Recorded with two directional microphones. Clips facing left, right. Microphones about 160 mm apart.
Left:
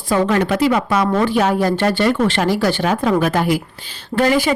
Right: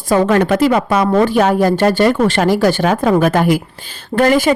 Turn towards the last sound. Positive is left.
turn(degrees=-50)  # may be behind; listen again after turning